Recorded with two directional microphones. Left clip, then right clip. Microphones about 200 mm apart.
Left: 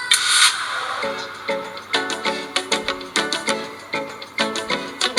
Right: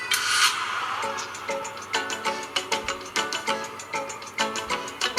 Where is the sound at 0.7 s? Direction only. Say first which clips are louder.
Left 4 dB; 40° left (ahead or behind).